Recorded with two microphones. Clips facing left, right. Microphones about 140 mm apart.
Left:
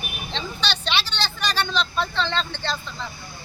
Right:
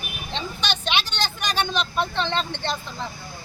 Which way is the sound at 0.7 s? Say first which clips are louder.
Right 2 dB; 50° right (ahead or behind).